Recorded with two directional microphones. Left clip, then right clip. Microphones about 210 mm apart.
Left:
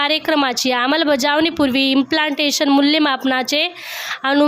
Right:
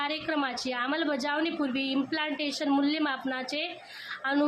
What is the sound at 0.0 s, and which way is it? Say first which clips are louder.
A woman's voice: left 14 dB; 50° left (ahead or behind).